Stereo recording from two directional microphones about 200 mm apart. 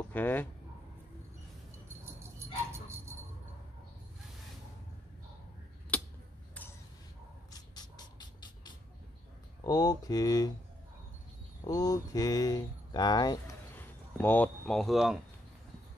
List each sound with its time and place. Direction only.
0.1 s speech: 10° left (ahead or behind)
2.3 s dog: 15° right (ahead or behind)
5.9 s a sound: 5° left (ahead or behind)
7.5 s music: 20° left (ahead or behind)
9.6 s speech: 20° left (ahead or behind)
11.6 s speech: 20° left (ahead or behind)
14.1 s speech: 10° left (ahead or behind)